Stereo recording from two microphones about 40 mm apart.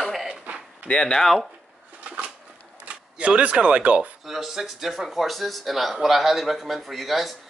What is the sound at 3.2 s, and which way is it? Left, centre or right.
Speech, right.